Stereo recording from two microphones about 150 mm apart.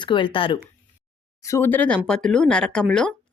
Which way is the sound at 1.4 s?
20° left (ahead or behind).